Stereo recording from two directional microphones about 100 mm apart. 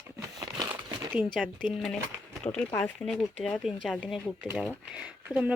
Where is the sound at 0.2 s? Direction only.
35° right (ahead or behind).